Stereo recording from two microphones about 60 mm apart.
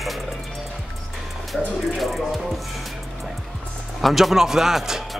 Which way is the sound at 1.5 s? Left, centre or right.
Centre.